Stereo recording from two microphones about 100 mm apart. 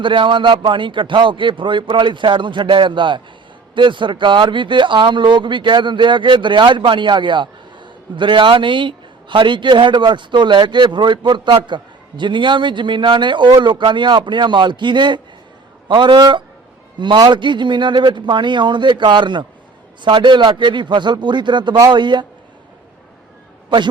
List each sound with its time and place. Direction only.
0.0 s speech: 55° right (ahead or behind)
23.6 s a man's voice: 50° right (ahead or behind)